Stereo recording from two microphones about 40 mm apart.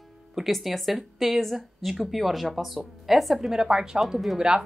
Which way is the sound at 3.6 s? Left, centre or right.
Centre.